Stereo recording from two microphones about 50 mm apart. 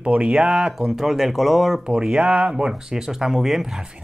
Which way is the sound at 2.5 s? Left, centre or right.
Centre.